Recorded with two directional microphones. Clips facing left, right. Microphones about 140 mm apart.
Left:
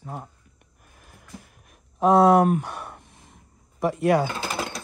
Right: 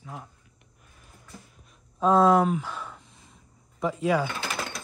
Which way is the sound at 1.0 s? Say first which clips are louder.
Left 4 dB; 65° left (ahead or behind).